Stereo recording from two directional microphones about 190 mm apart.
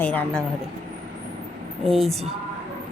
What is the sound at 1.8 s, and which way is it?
Speech, centre (ahead or behind).